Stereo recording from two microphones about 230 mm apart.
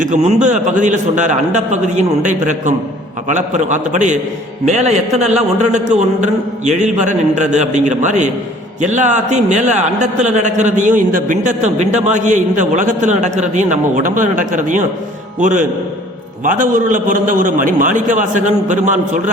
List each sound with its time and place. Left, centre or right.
0.0 s a man's voice: right